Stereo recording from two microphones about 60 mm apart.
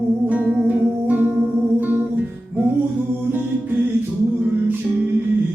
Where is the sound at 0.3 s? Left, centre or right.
Right.